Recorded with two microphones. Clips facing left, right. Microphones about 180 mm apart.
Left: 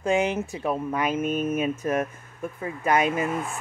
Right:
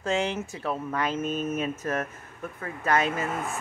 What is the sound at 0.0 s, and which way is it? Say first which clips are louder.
Speech: left 4 dB; 15° left (ahead or behind).